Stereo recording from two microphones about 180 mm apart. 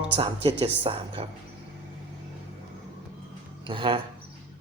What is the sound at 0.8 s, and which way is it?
Speech, 30° right (ahead or behind).